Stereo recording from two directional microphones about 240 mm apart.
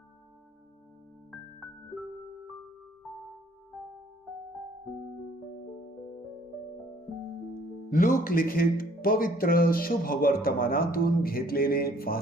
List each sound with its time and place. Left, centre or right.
1.3 s music: centre
7.9 s speech: left